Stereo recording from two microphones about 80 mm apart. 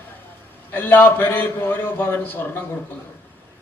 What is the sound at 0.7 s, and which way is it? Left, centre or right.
A man's voice, left.